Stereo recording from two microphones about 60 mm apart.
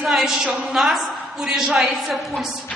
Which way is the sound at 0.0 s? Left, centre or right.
Centre.